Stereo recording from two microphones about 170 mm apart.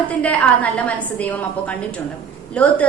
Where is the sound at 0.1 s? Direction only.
10° left (ahead or behind).